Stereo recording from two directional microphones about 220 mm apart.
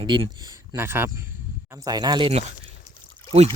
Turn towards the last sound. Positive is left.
turn(degrees=-25)  # may be behind; listen again after turning